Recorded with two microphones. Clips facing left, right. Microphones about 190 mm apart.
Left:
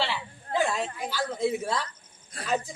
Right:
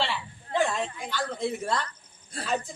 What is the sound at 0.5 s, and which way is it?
A woman's voice, 5° left (ahead or behind).